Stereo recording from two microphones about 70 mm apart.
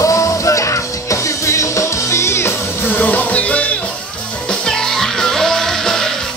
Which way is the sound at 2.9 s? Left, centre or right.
Left.